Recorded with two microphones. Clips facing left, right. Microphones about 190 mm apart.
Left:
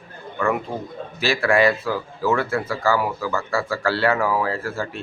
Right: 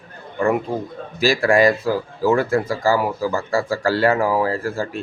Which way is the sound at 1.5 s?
40° right (ahead or behind).